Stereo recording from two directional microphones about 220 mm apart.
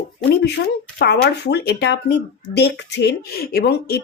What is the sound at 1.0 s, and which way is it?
Speech, 50° left (ahead or behind).